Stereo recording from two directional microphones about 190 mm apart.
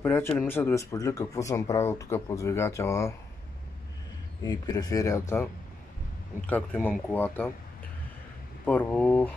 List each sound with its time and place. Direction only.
0.0 s speech: 10° left (ahead or behind)
4.4 s speech: 20° left (ahead or behind)
8.6 s speech: 10° left (ahead or behind)